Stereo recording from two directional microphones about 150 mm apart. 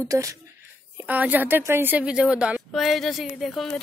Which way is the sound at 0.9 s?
10° right (ahead or behind).